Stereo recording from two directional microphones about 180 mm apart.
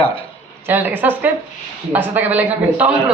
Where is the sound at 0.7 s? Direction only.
10° right (ahead or behind).